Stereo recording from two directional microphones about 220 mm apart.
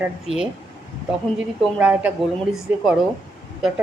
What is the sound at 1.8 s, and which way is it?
Speech, 5° right (ahead or behind).